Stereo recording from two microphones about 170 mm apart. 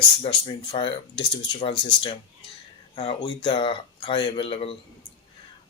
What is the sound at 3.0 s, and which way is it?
Speech, 30° left (ahead or behind).